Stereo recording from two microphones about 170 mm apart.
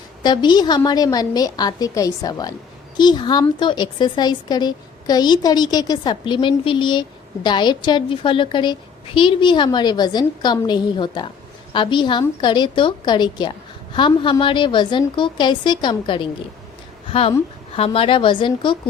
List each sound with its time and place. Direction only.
0.2 s a woman's voice: 25° left (ahead or behind)